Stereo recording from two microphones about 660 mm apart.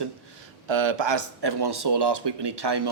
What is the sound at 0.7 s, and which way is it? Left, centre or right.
Speech, right.